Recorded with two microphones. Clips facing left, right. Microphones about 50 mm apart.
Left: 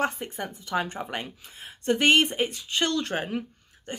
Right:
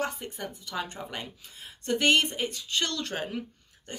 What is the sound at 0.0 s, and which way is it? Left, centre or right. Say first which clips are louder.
A woman's voice: left 4 dB; left.